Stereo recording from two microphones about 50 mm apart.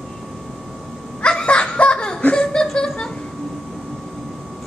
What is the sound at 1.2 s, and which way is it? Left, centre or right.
Laughter, centre.